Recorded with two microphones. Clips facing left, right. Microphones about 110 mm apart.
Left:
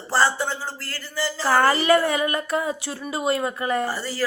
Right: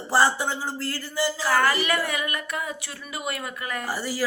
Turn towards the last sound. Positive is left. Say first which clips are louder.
# left 1 dB
turn(degrees=-10)  # may be behind; listen again after turning